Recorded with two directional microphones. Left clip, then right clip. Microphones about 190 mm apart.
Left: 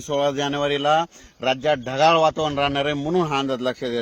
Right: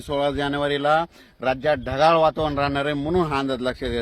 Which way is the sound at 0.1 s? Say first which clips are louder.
Left 1 dB; 30° left (ahead or behind).